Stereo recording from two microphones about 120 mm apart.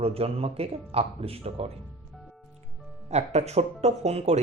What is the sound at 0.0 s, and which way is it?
Speech, 55° right (ahead or behind).